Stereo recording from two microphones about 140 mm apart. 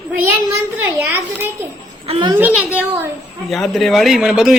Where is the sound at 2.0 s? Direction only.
45° right (ahead or behind).